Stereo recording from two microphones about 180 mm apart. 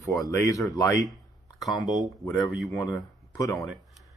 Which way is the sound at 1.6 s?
Centre (ahead or behind).